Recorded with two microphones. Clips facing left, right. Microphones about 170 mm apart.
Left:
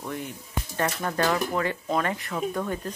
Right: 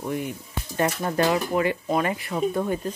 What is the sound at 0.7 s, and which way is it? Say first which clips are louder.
Speech: right 4 dB; 20° right (ahead or behind).